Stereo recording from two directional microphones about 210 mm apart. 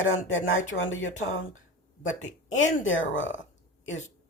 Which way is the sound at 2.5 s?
65° left (ahead or behind).